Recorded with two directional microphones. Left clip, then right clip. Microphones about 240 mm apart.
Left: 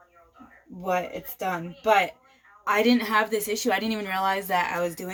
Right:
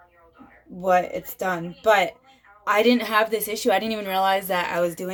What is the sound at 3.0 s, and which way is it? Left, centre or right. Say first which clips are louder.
Speech: right 2 dB; centre.